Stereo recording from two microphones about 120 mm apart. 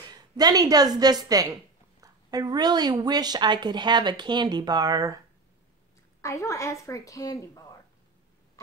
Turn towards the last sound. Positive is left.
turn(degrees=30)  # may be behind; listen again after turning